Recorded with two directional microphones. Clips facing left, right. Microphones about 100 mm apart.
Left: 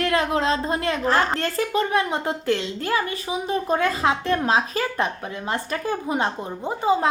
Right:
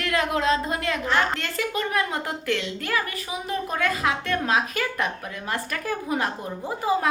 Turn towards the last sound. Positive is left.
turn(degrees=25)  # may be behind; listen again after turning